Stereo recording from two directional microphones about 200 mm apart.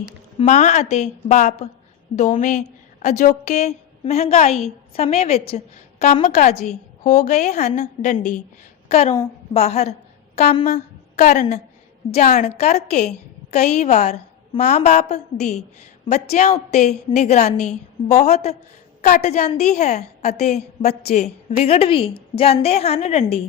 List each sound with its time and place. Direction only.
0.3 s a woman's voice: 35° left (ahead or behind)
19.0 s a woman's voice: 45° left (ahead or behind)